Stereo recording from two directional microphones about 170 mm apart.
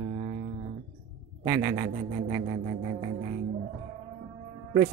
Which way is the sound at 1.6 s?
35° right (ahead or behind).